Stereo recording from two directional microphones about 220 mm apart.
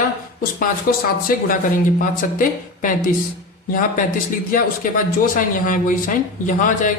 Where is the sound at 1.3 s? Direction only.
40° left (ahead or behind).